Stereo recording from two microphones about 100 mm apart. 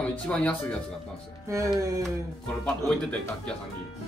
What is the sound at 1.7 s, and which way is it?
Speech, 35° right (ahead or behind).